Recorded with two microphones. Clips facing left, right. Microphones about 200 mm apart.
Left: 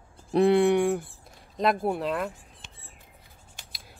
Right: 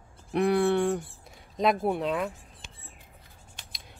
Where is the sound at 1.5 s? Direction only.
Centre (ahead or behind).